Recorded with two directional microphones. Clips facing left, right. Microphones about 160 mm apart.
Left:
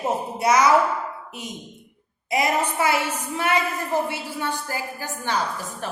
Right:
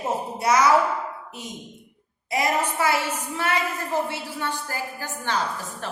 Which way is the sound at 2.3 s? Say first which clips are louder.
Left 1 dB; 20° left (ahead or behind).